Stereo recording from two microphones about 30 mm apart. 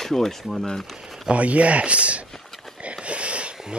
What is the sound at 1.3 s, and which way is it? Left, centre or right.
Speech, right.